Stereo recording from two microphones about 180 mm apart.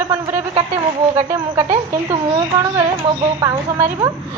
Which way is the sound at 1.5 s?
20° right (ahead or behind).